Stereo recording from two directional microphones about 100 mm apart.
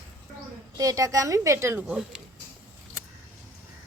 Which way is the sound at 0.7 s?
35° right (ahead or behind).